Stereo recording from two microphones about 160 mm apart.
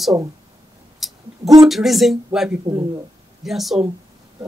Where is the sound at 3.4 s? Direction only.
Centre (ahead or behind).